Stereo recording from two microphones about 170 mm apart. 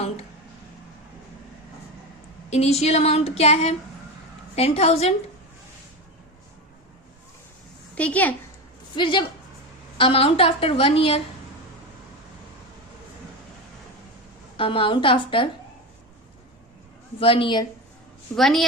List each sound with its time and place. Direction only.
2.5 s speech: 40° left (ahead or behind)
7.9 s a woman's voice: 10° left (ahead or behind)
9.0 s speech: 30° left (ahead or behind)
14.5 s speech: 30° left (ahead or behind)
17.2 s speech: 30° left (ahead or behind)
18.3 s a woman's voice: centre (ahead or behind)